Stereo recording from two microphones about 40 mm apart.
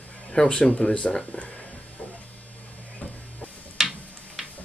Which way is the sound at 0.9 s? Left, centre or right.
Left.